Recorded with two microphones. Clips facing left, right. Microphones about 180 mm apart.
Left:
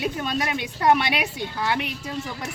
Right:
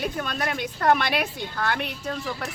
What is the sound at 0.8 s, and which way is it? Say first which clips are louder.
Speech: left 1 dB; 15° left (ahead or behind).